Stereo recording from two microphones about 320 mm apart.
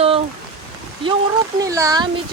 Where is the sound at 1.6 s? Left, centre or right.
Centre.